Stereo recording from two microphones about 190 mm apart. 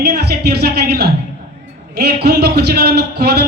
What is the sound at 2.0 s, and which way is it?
A man's voice, 55° right (ahead or behind).